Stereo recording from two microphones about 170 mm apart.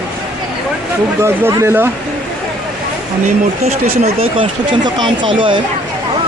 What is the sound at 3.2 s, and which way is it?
Speech, 40° right (ahead or behind).